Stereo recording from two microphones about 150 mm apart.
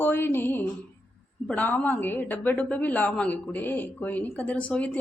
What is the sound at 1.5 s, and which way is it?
A woman's voice, 10° left (ahead or behind).